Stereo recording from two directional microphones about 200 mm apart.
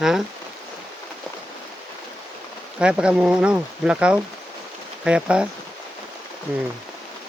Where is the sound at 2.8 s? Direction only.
5° right (ahead or behind).